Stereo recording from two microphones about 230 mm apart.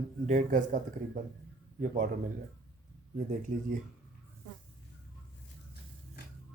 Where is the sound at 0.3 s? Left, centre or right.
Right.